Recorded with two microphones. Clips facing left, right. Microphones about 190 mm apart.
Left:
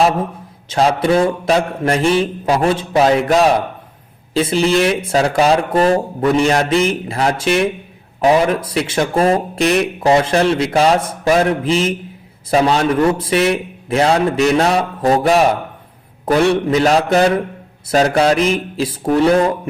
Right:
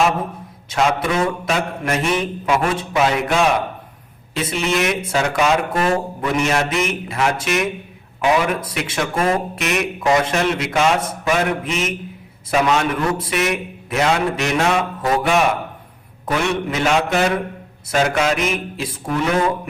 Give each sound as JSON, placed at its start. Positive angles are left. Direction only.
{"t": 0.7, "sound": "speech", "side_deg": 30}